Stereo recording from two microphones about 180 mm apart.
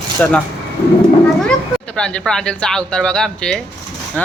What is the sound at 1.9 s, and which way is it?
A man's voice, 5° left (ahead or behind).